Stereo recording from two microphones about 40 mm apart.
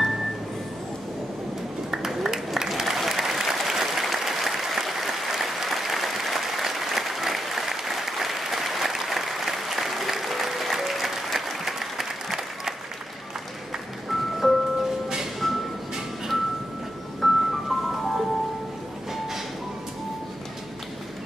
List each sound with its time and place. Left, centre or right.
1.9 s applause: centre
14.0 s music: centre
17.2 s music: centre